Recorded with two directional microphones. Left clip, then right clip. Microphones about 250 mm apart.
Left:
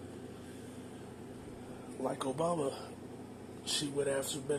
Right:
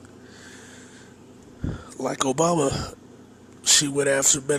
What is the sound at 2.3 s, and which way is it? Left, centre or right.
Speech, right.